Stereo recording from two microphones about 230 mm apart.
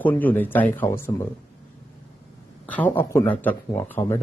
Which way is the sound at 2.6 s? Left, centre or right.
Centre.